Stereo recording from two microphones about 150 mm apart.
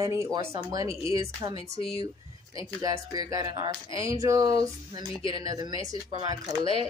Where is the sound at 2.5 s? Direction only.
25° right (ahead or behind).